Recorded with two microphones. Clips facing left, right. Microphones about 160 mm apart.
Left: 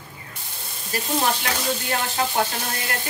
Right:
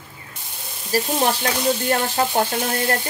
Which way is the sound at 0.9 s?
35° right (ahead or behind).